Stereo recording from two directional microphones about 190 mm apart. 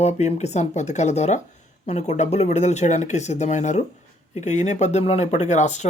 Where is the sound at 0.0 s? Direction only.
35° left (ahead or behind).